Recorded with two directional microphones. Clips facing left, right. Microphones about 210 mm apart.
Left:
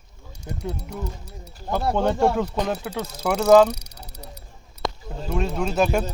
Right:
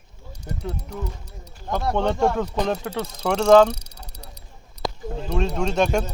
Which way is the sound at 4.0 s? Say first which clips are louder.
Left 2 dB; 10° right (ahead or behind).